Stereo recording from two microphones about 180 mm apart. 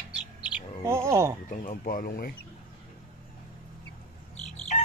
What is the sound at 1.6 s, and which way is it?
Speech, 45° left (ahead or behind).